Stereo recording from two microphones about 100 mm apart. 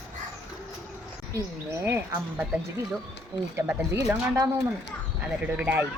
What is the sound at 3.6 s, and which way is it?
Speech, 20° right (ahead or behind).